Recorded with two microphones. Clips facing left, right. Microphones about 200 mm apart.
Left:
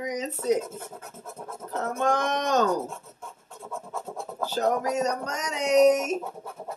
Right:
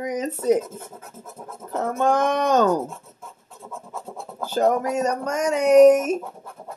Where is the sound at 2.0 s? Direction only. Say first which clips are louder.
Right 5 dB; 55° right (ahead or behind).